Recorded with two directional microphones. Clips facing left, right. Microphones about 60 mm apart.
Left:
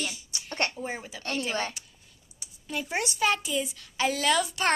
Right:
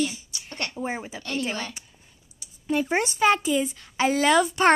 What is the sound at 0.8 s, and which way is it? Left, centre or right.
Speech, right.